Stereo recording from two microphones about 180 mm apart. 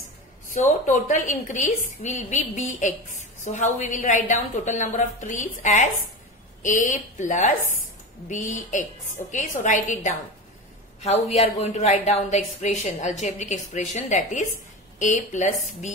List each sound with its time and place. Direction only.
0.5 s a woman's voice: 45° left (ahead or behind)